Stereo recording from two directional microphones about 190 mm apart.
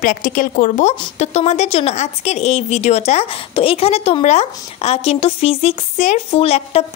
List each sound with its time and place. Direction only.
0.0 s speech: 45° left (ahead or behind)